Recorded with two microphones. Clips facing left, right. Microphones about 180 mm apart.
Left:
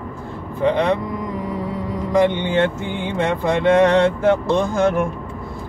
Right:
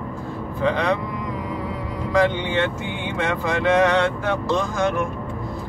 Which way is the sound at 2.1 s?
20° left (ahead or behind).